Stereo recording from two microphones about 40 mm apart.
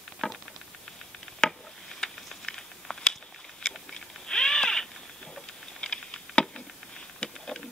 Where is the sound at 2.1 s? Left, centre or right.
Centre.